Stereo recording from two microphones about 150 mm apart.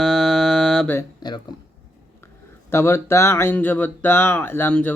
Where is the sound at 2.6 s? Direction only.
15° left (ahead or behind).